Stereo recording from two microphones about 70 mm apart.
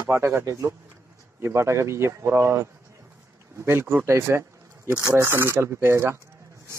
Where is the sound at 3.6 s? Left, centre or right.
Right.